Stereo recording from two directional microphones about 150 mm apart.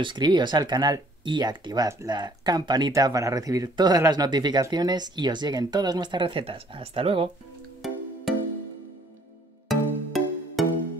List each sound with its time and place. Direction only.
0.0 s speech: 30° right (ahead or behind)
7.8 s music: centre (ahead or behind)
9.7 s music: centre (ahead or behind)